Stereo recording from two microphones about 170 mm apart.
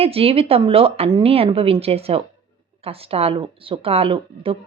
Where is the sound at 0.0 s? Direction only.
35° right (ahead or behind).